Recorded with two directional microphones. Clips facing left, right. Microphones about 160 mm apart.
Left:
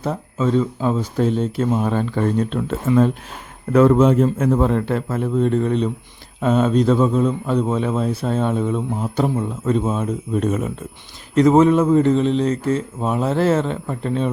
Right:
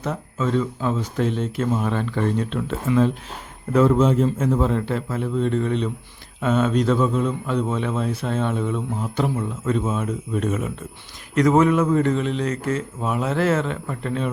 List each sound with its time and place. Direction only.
0.0 s speech: 35° left (ahead or behind)
3.7 s a man's voice: 60° left (ahead or behind); by 10.7 s 35° left (ahead or behind)
11.3 s speech: 25° left (ahead or behind)